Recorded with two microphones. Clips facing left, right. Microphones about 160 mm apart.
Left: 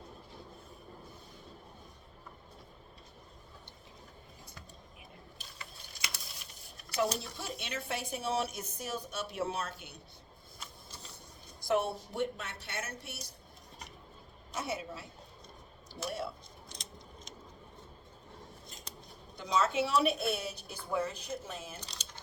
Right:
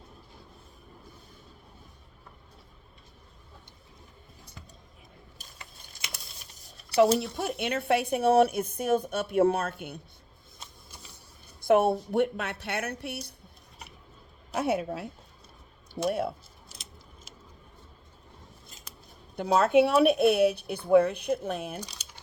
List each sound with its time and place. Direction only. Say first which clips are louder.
6.9 s speech: right 11 dB; 80° right; by 10.0 s 55° right (ahead or behind)
11.6 s speech: right 9 dB; 60° right (ahead or behind)
14.5 s speech: right 10 dB; 60° right (ahead or behind)
16.0 s speech: right 10 dB; 55° right (ahead or behind)
16.6 s keys jangling: left 1 dB; 5° right (ahead or behind)
19.4 s speech: right 9 dB; 60° right (ahead or behind)
21.8 s a sound: right 7 dB; 10° right (ahead or behind)